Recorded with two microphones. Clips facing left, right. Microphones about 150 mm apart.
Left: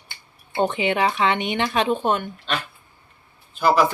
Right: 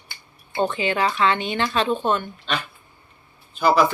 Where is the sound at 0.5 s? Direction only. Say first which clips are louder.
Left 1 dB; 20° left (ahead or behind).